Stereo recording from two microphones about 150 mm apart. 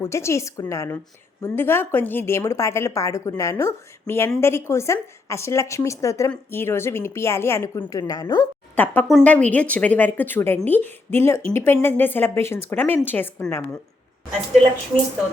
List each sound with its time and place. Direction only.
0.0 s a woman's voice: 20° left (ahead or behind)
8.7 s a woman's voice: 10° left (ahead or behind)